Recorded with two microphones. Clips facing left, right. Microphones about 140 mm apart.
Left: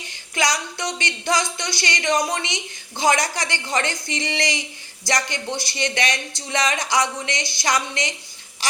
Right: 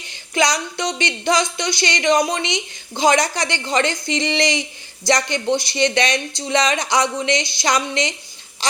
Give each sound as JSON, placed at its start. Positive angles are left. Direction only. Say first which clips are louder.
{"t": 0.3, "sound": "speech", "louder": "right 4 dB", "side_deg": -20}